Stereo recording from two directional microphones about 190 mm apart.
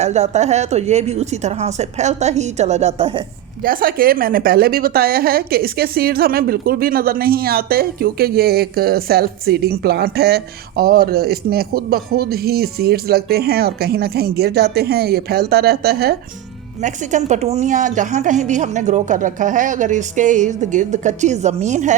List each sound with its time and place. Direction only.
0.0 s a woman's voice: 35° right (ahead or behind)
3.6 s a woman's voice: 50° right (ahead or behind)
16.8 s a woman's voice: 40° right (ahead or behind)